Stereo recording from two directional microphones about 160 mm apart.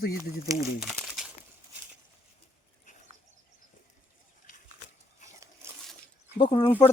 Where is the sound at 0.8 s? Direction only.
Centre (ahead or behind).